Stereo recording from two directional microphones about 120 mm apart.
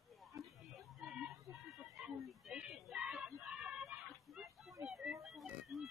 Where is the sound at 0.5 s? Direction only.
Centre (ahead or behind).